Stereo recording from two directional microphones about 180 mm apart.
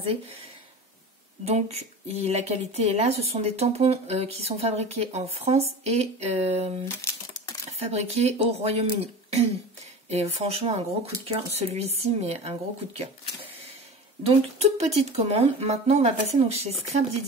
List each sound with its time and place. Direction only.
1.4 s speech: 35° right (ahead or behind)
7.0 s typing: 15° left (ahead or behind)
7.8 s speech: 35° right (ahead or behind)